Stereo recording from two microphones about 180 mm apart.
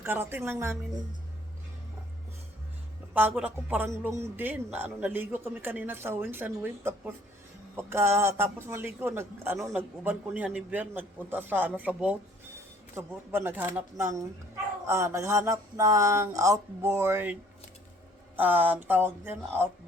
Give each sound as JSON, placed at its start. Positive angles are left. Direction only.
{"t": 0.0, "sound": "a man's voice", "side_deg": -10}
{"t": 3.2, "sound": "a man's voice", "side_deg": -10}
{"t": 18.3, "sound": "a man's voice", "side_deg": -10}